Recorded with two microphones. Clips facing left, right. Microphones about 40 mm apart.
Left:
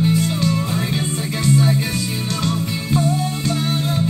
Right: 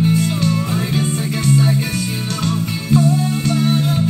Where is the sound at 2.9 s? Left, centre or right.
Left.